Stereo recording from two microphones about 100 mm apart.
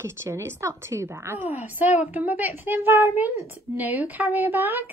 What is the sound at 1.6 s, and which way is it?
A child's voice, 15° right (ahead or behind).